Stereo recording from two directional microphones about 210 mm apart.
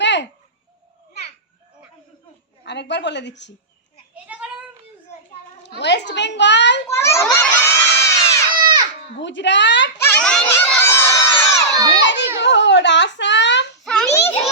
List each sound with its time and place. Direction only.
0.0 s a sound: 55° left (ahead or behind)
2.6 s a child's voice: 55° left (ahead or behind)
4.1 s a sound: 5° right (ahead or behind)
5.6 s a child's voice: 55° left (ahead or behind)
6.9 s crowd: 15° left (ahead or behind)
8.5 s baby cry: 20° right (ahead or behind)
9.1 s a child's voice: 60° left (ahead or behind)
10.0 s a sound: 5° left (ahead or behind)
10.5 s crowd: 10° left (ahead or behind)
12.0 s baby cry: 55° left (ahead or behind)
12.4 s a sound: 55° left (ahead or behind)
13.8 s children playing: 5° left (ahead or behind)